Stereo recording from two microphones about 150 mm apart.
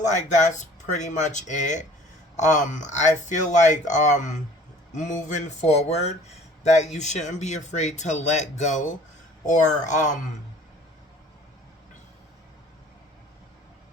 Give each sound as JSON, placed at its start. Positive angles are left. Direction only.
{"t": 0.0, "sound": "speech", "side_deg": 55}